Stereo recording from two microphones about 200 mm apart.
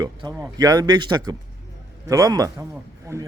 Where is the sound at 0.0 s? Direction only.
20° right (ahead or behind).